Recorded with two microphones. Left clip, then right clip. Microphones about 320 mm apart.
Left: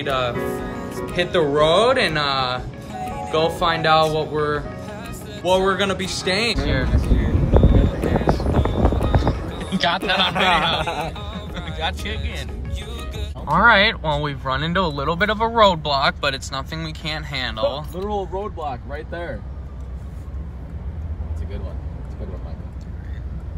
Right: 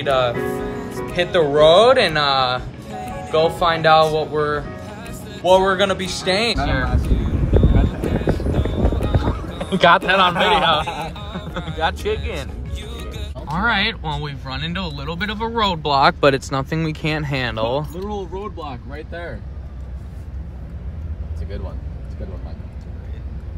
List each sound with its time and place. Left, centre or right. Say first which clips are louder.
0.0 s music: right 4 dB; centre
10.0 s a man's voice: right 3 dB; centre
16.0 s speech: right 6 dB; right